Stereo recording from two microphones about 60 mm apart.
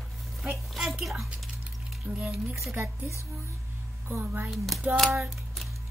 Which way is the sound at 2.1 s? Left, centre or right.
Right.